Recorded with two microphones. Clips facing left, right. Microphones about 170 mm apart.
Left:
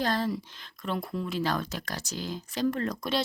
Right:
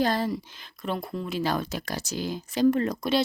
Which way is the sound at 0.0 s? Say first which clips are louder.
Right 3 dB; 10° right (ahead or behind).